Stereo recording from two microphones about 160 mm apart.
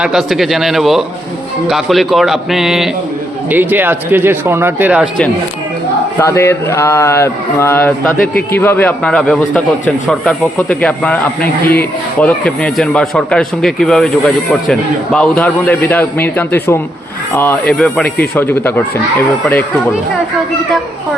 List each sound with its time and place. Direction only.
0.0 s speech: 5° right (ahead or behind)
6.1 s a man's voice: 15° left (ahead or behind)